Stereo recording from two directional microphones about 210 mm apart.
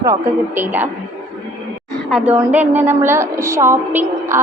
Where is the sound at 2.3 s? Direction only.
10° right (ahead or behind).